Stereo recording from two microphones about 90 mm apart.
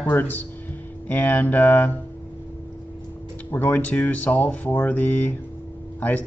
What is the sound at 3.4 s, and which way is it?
Speech, 20° left (ahead or behind).